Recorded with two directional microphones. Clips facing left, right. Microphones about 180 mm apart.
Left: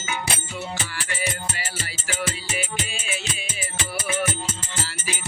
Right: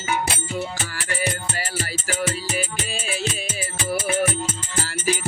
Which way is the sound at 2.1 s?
40° right (ahead or behind).